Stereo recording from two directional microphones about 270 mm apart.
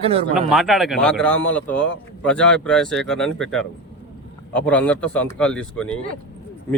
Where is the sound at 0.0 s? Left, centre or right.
Right.